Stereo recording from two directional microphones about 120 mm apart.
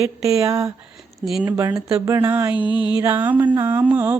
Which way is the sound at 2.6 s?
40° left (ahead or behind).